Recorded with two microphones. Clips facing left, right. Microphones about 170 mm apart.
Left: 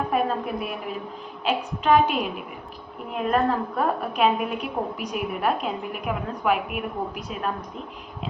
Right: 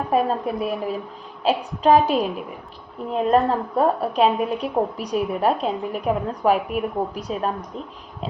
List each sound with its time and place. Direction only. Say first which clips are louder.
0.1 s a woman's voice: right 3 dB; 35° right (ahead or behind)